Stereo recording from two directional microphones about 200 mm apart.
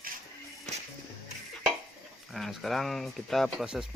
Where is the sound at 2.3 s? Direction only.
Centre (ahead or behind).